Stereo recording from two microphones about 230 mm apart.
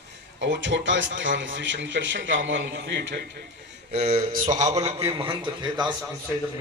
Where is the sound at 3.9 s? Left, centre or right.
Right.